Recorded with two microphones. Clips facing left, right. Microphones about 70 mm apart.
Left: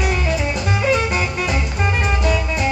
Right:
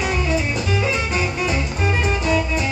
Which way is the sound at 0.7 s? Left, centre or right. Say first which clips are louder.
Left 3 dB; left.